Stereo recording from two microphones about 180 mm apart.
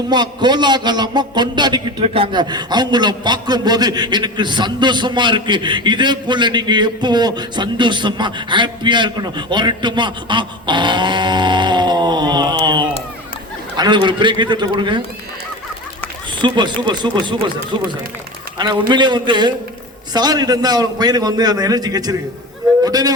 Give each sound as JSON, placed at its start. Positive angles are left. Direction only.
{"t": 0.1, "sound": "a man's voice", "side_deg": -25}
{"t": 16.4, "sound": "a man's voice", "side_deg": -25}
{"t": 18.6, "sound": "a man's voice", "side_deg": -25}